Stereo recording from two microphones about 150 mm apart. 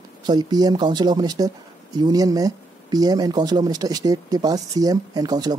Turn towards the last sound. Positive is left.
turn(degrees=-25)  # may be behind; listen again after turning